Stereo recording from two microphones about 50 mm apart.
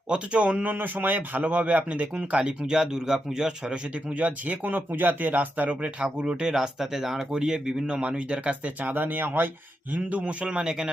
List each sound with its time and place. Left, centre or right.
0.1 s a man's voice: right
4.1 s speech: right
5.8 s a man's voice: right
6.5 s a man's voice: centre; by 10.3 s right
10.4 s speech: centre